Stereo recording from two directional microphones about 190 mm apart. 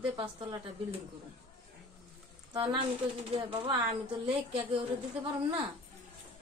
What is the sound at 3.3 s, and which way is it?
Speech, 30° right (ahead or behind).